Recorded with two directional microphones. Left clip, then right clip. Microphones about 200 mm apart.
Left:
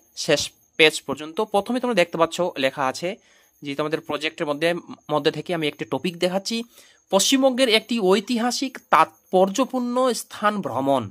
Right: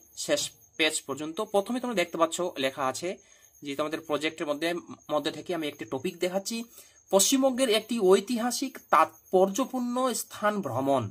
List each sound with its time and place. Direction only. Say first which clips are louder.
0.1 s speech: left 7 dB; 30° left (ahead or behind)